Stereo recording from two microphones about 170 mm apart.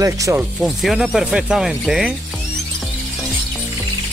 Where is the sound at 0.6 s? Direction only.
Centre (ahead or behind).